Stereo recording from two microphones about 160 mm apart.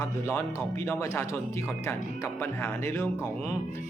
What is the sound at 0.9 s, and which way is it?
Speech, 15° left (ahead or behind).